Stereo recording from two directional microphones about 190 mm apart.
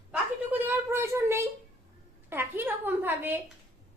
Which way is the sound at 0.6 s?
15° right (ahead or behind).